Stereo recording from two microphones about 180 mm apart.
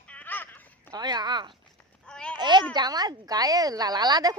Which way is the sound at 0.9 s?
25° right (ahead or behind).